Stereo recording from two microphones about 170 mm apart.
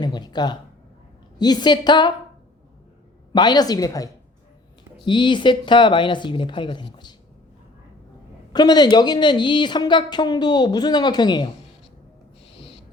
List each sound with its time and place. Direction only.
0.0 s a woman's voice: 25° left (ahead or behind)
3.3 s a woman's voice: 25° left (ahead or behind)
8.5 s a woman's voice: 25° left (ahead or behind)